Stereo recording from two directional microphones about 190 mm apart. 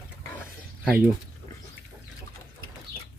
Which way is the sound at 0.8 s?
5° right (ahead or behind).